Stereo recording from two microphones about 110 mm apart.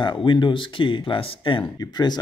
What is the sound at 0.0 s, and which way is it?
Speech, 45° left (ahead or behind).